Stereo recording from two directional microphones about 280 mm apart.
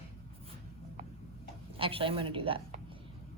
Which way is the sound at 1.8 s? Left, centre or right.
Centre.